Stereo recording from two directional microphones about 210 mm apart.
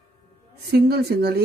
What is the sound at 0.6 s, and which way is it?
Speech, 50° right (ahead or behind).